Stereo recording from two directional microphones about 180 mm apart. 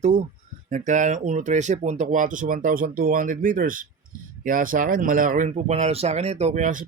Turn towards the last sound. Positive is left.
turn(degrees=-45)  # may be behind; listen again after turning